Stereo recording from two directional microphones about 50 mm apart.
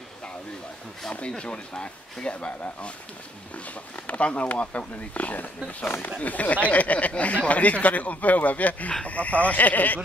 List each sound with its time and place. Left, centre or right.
1.4 s speech: left